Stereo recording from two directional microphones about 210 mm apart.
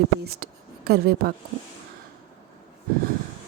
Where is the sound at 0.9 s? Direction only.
45° right (ahead or behind).